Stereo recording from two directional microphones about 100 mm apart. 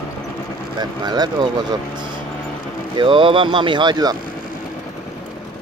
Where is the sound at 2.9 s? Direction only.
55° right (ahead or behind).